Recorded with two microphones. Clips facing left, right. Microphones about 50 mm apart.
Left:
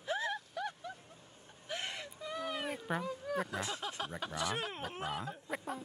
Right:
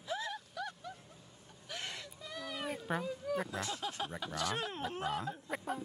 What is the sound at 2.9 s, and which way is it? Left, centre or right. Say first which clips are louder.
Speech: even; centre.